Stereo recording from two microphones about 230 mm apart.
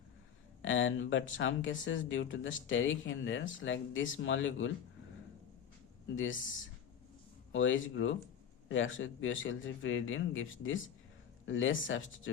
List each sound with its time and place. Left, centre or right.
0.6 s speech: left
7.5 s speech: left